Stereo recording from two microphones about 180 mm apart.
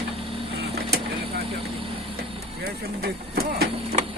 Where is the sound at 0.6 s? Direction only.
60° right (ahead or behind).